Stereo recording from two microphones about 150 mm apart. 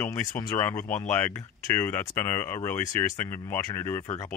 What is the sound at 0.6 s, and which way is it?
Speech, 15° left (ahead or behind).